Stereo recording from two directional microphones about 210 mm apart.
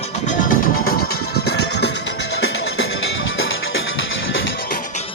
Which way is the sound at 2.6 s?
70° left (ahead or behind).